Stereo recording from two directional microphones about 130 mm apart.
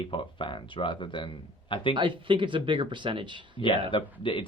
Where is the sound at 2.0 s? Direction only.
40° right (ahead or behind).